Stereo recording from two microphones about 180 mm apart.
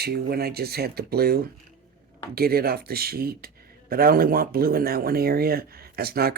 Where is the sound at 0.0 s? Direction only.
60° right (ahead or behind).